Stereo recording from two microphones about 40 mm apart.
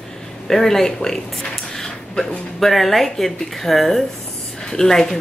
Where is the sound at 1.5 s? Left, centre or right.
Centre.